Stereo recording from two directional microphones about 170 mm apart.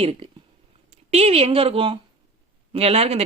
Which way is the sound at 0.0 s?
35° right (ahead or behind).